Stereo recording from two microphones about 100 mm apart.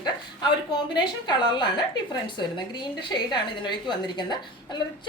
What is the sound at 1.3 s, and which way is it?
A woman's voice, 50° left (ahead or behind).